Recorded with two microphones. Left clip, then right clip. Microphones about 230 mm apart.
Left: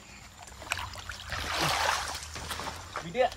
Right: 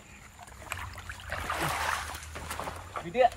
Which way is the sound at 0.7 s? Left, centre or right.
Centre.